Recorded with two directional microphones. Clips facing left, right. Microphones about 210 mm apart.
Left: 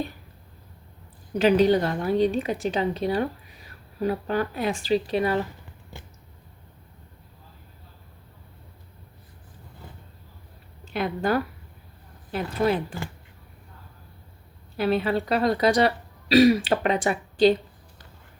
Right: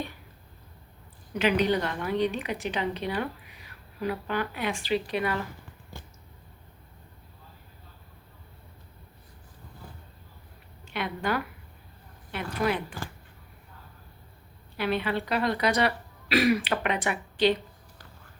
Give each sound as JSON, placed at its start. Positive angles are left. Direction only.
{"t": 1.3, "sound": "a woman's voice", "side_deg": 35}
{"t": 10.9, "sound": "a woman's voice", "side_deg": 35}
{"t": 12.5, "sound": "a woman's voice", "side_deg": 30}
{"t": 14.8, "sound": "a woman's voice", "side_deg": 35}